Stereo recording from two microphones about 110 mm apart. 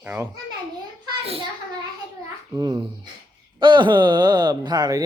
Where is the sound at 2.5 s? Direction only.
40° right (ahead or behind).